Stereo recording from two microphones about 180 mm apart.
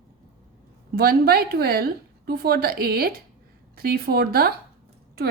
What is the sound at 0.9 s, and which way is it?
A woman's voice, 60° right (ahead or behind).